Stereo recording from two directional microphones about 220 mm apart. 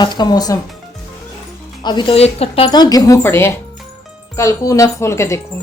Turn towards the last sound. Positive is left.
turn(degrees=10)  # may be behind; listen again after turning